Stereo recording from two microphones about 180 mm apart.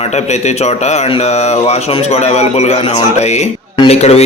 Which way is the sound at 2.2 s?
35° left (ahead or behind).